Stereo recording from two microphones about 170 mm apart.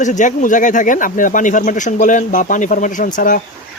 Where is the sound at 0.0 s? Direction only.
45° left (ahead or behind).